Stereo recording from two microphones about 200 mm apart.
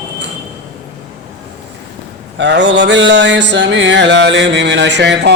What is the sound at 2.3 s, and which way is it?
Mantra, 60° right (ahead or behind).